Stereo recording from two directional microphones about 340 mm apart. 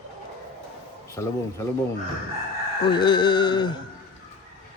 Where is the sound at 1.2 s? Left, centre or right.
Centre.